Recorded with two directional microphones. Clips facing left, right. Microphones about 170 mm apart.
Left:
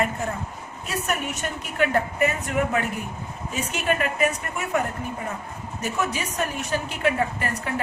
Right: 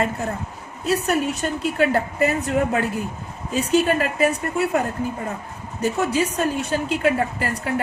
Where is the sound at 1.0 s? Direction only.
35° right (ahead or behind).